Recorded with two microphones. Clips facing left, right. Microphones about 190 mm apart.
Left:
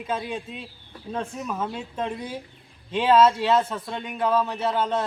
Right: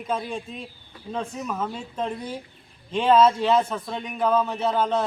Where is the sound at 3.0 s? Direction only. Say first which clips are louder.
Even; centre (ahead or behind).